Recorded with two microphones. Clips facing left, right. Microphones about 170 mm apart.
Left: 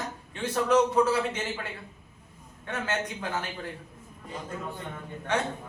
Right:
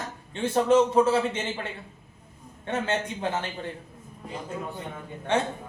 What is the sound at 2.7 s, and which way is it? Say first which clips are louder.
Speech: right 4 dB; 25° right (ahead or behind).